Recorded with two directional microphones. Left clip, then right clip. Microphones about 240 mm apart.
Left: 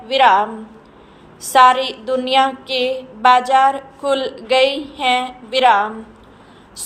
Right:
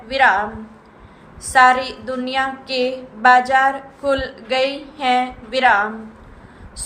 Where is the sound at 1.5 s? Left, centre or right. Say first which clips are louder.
Left 2 dB; left.